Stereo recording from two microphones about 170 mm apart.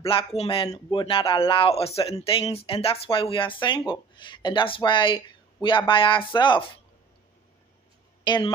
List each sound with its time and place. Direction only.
0.0 s speech: 30° left (ahead or behind)
8.2 s speech: 25° left (ahead or behind)